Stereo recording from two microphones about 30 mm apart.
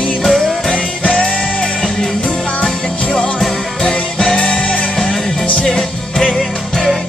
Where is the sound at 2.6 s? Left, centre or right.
Centre.